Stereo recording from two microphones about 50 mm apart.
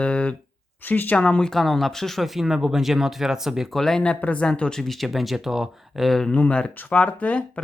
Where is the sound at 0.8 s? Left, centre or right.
Left.